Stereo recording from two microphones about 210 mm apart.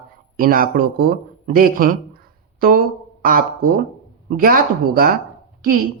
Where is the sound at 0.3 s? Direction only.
45° right (ahead or behind).